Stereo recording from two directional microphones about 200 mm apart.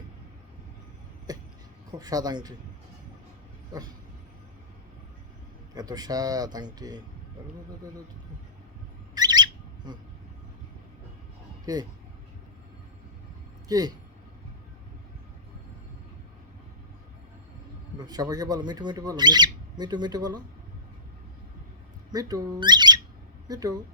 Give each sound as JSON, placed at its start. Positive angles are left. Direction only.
{"t": 1.3, "sound": "a sound", "side_deg": -20}
{"t": 1.9, "sound": "speech", "side_deg": -20}
{"t": 5.7, "sound": "speech", "side_deg": -20}
{"t": 9.1, "sound": "bird", "side_deg": -20}
{"t": 11.6, "sound": "speech", "side_deg": -20}
{"t": 13.7, "sound": "a man's voice", "side_deg": -20}
{"t": 18.0, "sound": "speech", "side_deg": -20}
{"t": 22.1, "sound": "speech", "side_deg": -20}